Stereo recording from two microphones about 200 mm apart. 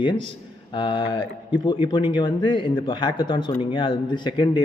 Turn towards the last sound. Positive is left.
turn(degrees=25)  # may be behind; listen again after turning